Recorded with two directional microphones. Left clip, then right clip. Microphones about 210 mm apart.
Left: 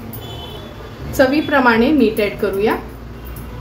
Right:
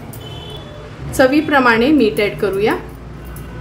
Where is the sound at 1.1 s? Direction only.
15° right (ahead or behind).